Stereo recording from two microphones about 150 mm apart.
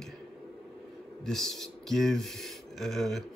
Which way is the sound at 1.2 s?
5° left (ahead or behind).